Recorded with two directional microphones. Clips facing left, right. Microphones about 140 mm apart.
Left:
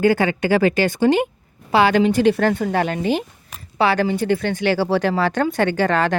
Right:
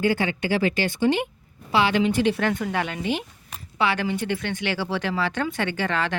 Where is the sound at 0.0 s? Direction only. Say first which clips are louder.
Left 6 dB; 45° left (ahead or behind).